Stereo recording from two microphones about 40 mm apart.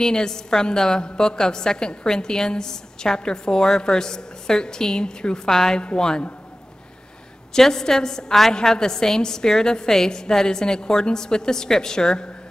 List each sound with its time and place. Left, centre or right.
0.0 s a woman's voice: centre
5.5 s a woman's voice: centre
5.8 s a woman's voice: left
7.5 s a woman's voice: centre